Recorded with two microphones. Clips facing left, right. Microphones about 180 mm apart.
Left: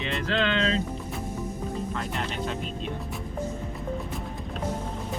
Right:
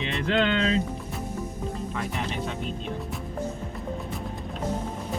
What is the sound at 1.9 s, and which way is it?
Speech, centre (ahead or behind).